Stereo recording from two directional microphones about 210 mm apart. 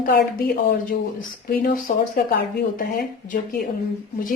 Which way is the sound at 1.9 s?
40° left (ahead or behind).